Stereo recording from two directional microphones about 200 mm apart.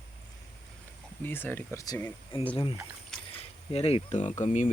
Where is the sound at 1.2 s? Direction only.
10° left (ahead or behind).